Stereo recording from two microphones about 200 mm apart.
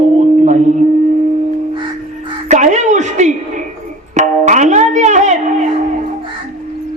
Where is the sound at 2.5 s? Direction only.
35° right (ahead or behind).